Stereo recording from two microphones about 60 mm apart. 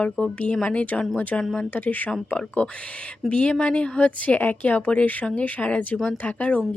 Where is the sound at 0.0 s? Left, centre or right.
Left.